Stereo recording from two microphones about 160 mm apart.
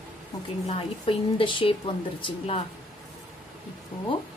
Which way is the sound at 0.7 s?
35° left (ahead or behind).